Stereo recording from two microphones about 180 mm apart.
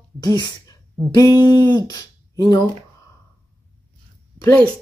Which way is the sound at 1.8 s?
20° left (ahead or behind).